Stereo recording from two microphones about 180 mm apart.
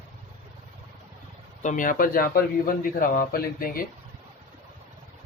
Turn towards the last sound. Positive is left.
turn(degrees=55)  # may be behind; listen again after turning